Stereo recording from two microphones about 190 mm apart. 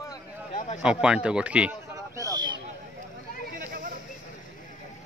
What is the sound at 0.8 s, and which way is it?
Speech, 5° right (ahead or behind).